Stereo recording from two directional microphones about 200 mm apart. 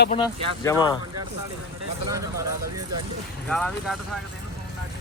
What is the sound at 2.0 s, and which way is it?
Speech, 15° right (ahead or behind).